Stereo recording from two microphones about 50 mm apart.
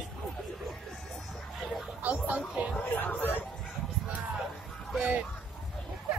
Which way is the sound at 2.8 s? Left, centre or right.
Left.